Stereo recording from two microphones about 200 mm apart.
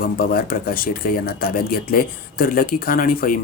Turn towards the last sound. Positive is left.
turn(degrees=45)  # may be behind; listen again after turning